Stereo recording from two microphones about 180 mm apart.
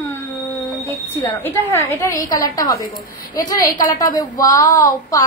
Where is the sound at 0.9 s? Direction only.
15° left (ahead or behind).